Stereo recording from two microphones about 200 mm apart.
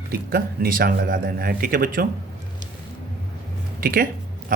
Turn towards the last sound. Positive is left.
turn(degrees=-45)  # may be behind; listen again after turning